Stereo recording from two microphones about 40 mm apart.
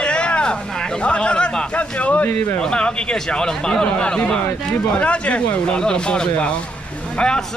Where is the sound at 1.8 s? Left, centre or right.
Left.